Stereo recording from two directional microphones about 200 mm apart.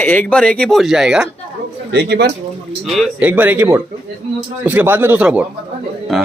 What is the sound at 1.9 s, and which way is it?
Speech, 55° right (ahead or behind).